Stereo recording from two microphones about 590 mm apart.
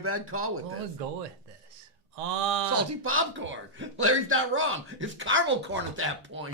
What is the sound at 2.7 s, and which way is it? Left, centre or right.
A man's voice, right.